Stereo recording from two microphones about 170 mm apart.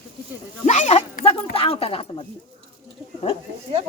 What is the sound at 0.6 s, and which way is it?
Speech, 45° left (ahead or behind).